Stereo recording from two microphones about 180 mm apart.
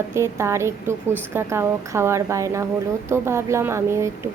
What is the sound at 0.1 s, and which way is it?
A woman's voice, 15° right (ahead or behind).